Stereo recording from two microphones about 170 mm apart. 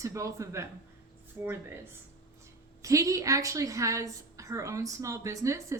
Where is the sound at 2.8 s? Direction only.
20° right (ahead or behind).